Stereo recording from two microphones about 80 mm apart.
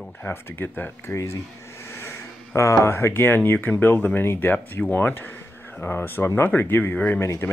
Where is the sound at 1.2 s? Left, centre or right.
Left.